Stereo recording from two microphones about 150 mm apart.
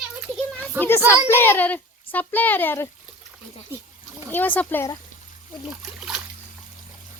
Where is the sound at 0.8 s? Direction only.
15° left (ahead or behind).